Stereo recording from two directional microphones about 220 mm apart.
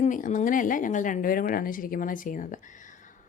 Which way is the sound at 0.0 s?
35° left (ahead or behind).